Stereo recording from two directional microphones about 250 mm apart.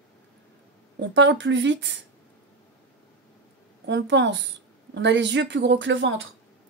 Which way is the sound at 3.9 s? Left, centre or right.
Right.